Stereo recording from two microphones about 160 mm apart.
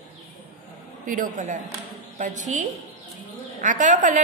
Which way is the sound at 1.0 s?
50° right (ahead or behind).